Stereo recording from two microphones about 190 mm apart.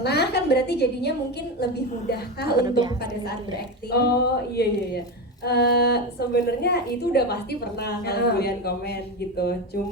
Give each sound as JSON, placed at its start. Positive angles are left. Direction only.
{"t": 0.0, "sound": "a woman's voice", "side_deg": 60}
{"t": 2.6, "sound": "a woman's voice", "side_deg": -20}
{"t": 3.9, "sound": "a woman's voice", "side_deg": 55}